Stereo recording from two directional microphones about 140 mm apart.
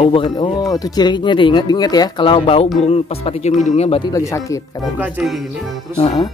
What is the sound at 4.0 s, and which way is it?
Speech, 25° left (ahead or behind).